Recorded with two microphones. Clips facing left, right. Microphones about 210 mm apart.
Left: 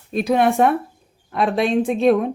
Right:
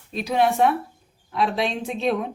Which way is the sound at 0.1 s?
55° left (ahead or behind).